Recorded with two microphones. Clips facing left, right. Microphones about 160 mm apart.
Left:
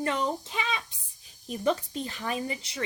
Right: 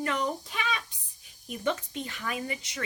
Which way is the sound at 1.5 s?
35° left (ahead or behind).